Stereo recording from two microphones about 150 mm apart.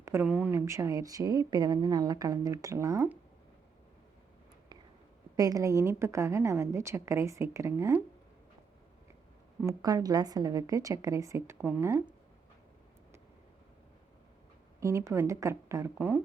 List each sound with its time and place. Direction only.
0.0 s speech: 15° right (ahead or behind)
5.4 s speech: 25° right (ahead or behind)
9.6 s speech: 20° right (ahead or behind)
14.8 s speech: 20° right (ahead or behind)